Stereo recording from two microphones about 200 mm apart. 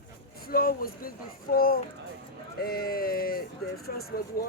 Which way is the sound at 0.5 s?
45° left (ahead or behind).